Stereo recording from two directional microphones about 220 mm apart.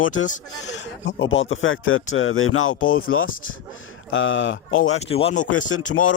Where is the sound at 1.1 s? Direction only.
60° left (ahead or behind).